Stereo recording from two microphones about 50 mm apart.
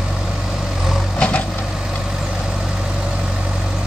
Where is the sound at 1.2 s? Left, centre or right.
Left.